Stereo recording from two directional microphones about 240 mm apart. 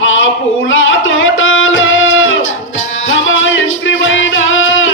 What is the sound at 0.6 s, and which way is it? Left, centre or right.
Music, left.